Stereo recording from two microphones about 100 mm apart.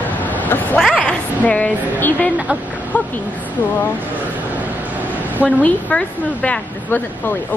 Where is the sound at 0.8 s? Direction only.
5° left (ahead or behind).